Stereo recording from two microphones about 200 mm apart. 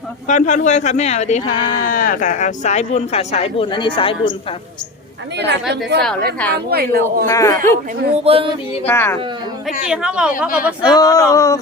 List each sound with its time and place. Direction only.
0.3 s speech: 40° left (ahead or behind)
5.4 s a woman's voice: 55° right (ahead or behind)
7.3 s speech: 15° left (ahead or behind)
8.2 s a sound: 30° right (ahead or behind)
8.9 s speech: 10° left (ahead or behind)
9.8 s a woman's voice: 5° right (ahead or behind)
10.8 s speech: 20° left (ahead or behind)